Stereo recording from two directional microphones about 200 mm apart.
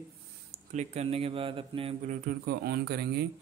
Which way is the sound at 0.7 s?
30° right (ahead or behind).